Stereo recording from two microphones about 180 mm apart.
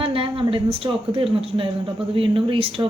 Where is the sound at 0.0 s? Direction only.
30° right (ahead or behind).